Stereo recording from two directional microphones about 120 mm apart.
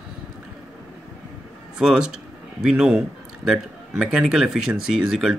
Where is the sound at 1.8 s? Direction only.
5° right (ahead or behind).